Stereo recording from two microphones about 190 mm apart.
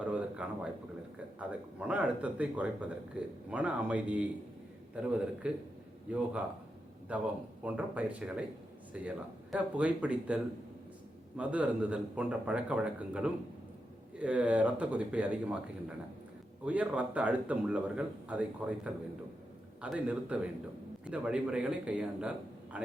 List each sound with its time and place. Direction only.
0.0 s a sound: 5° right (ahead or behind)
1.4 s a man's voice: 5° right (ahead or behind)
16.6 s speech: 5° right (ahead or behind)